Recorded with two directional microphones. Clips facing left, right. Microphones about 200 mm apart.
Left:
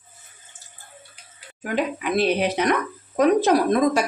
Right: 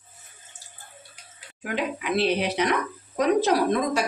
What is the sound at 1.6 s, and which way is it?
Speech, 45° left (ahead or behind).